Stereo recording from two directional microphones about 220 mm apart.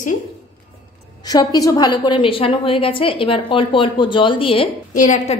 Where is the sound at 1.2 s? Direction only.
20° left (ahead or behind).